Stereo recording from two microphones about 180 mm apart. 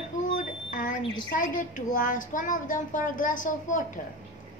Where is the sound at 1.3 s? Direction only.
45° left (ahead or behind).